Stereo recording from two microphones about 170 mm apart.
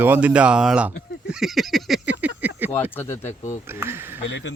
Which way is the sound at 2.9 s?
15° left (ahead or behind).